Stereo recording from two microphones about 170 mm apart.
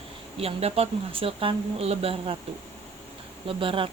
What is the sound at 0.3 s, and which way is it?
Speech, 35° right (ahead or behind).